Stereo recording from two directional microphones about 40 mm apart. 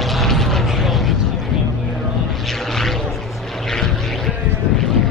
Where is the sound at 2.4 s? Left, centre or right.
Centre.